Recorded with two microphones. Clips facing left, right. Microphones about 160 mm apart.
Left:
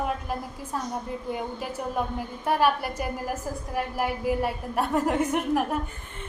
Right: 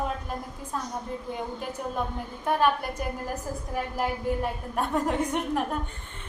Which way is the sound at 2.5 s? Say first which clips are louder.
Left 1 dB; 5° left (ahead or behind).